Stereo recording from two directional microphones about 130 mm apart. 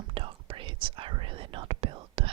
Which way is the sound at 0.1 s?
45° right (ahead or behind).